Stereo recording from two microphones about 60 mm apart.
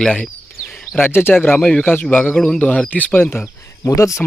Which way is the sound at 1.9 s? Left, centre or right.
Left.